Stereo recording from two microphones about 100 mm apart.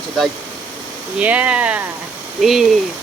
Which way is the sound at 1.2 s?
15° right (ahead or behind).